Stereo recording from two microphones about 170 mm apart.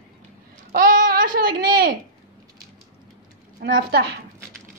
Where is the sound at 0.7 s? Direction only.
55° right (ahead or behind).